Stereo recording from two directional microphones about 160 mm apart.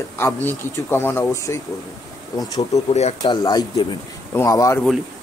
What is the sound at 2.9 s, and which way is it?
Speech, 45° left (ahead or behind).